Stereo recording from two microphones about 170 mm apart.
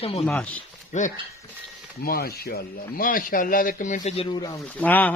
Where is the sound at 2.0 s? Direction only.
65° left (ahead or behind); by 4.5 s 25° left (ahead or behind).